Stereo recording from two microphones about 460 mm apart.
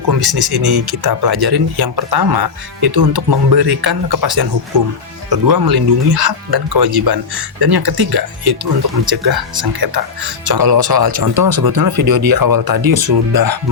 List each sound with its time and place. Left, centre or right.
0.3 s speech: right